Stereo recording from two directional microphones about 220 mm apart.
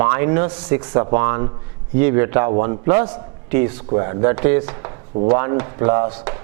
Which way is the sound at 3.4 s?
10° right (ahead or behind).